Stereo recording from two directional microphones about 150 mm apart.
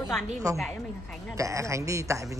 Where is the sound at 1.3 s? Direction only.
20° right (ahead or behind).